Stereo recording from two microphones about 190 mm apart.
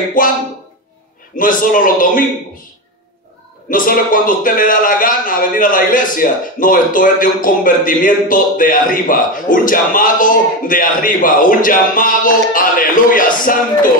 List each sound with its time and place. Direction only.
0.2 s a man's voice: 45° left (ahead or behind)
3.7 s a man's voice: 45° left (ahead or behind)